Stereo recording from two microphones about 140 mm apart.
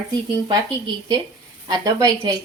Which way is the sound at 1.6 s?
30° right (ahead or behind).